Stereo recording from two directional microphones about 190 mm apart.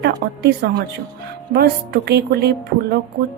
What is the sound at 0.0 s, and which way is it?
A woman's voice, 60° right (ahead or behind).